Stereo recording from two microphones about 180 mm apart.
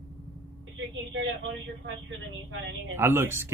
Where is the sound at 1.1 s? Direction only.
90° right.